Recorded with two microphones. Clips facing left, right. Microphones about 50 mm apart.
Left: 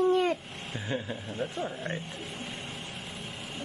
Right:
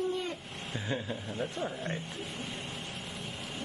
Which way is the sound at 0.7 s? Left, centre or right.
Centre.